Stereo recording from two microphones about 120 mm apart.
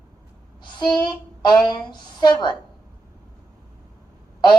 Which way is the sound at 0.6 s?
40° left (ahead or behind).